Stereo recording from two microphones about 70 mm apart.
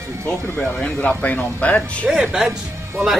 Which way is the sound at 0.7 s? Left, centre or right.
Centre.